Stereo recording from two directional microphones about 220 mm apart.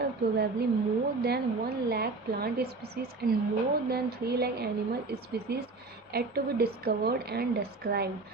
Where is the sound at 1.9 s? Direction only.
45° right (ahead or behind).